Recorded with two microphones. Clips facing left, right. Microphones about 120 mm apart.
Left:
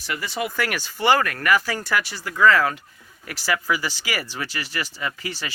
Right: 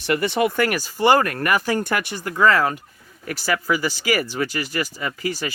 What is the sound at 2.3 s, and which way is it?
Speech, 40° right (ahead or behind).